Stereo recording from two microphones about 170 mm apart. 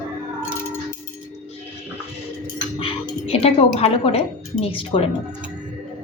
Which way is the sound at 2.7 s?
35° left (ahead or behind).